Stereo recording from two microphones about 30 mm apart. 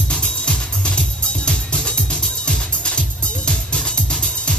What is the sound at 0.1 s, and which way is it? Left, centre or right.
Music, left.